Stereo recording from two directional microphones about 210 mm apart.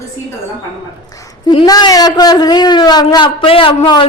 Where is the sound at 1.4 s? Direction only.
20° left (ahead or behind).